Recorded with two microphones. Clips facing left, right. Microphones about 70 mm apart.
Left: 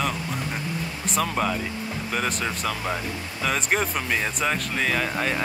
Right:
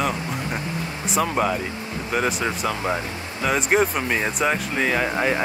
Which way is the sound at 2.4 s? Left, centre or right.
Right.